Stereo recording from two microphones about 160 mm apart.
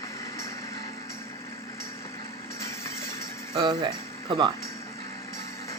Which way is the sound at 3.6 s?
25° right (ahead or behind).